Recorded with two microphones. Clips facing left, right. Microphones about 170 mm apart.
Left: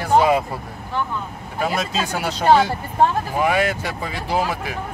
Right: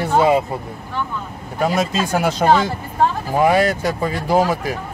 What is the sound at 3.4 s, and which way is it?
Speech, 35° right (ahead or behind).